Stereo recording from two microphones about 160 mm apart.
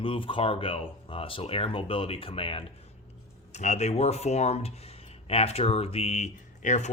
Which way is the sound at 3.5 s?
45° left (ahead or behind).